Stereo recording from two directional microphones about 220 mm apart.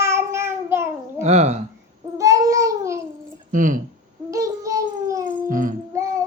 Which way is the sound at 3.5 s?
35° right (ahead or behind).